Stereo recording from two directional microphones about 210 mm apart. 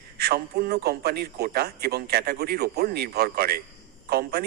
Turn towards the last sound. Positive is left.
turn(degrees=-50)  # may be behind; listen again after turning